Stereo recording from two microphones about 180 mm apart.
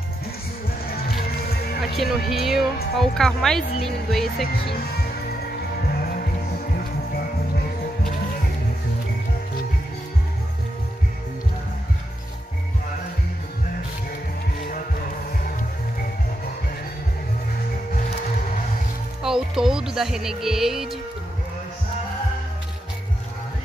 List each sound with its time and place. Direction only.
0.8 s music: 55° left (ahead or behind)
1.8 s speech: centre (ahead or behind)
5.9 s music: 55° left (ahead or behind)
19.2 s music: 5° right (ahead or behind)